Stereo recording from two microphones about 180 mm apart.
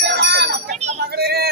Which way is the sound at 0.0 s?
65° right (ahead or behind).